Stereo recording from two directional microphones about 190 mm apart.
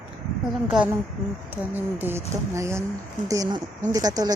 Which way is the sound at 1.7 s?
10° right (ahead or behind).